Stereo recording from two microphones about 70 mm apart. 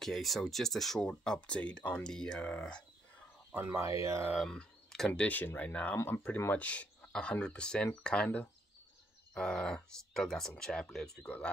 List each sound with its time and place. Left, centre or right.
0.0 s speech: centre
3.5 s speech: right
4.5 s a sound: centre
5.1 s speech: left
9.3 s speech: centre
11.2 s speech: left